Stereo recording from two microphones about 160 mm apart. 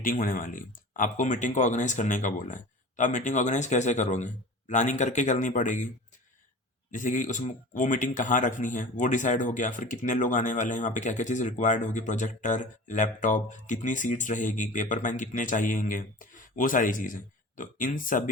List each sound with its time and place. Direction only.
0.0 s speech: 60° left (ahead or behind)
6.9 s speech: 55° left (ahead or behind)